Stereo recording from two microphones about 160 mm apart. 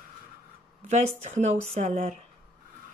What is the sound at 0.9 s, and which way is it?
Speech, 45° right (ahead or behind).